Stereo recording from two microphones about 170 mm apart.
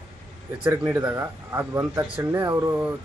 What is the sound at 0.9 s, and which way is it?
Speech, 15° right (ahead or behind).